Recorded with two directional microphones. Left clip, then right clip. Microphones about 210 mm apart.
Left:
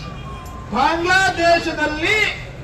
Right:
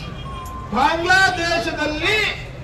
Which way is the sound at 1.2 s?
15° left (ahead or behind).